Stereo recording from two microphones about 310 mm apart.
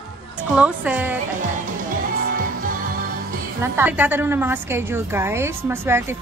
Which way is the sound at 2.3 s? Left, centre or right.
Right.